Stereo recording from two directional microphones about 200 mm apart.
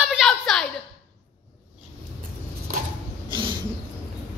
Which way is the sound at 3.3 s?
25° right (ahead or behind).